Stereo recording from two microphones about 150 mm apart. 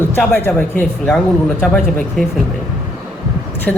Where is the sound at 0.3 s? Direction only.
15° left (ahead or behind).